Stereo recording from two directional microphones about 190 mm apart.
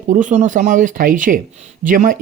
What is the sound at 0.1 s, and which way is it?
Speech, 40° right (ahead or behind).